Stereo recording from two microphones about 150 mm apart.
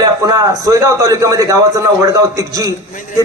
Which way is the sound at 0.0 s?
25° right (ahead or behind).